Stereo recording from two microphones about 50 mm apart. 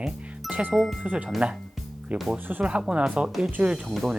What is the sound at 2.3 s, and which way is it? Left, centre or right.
Speech, right.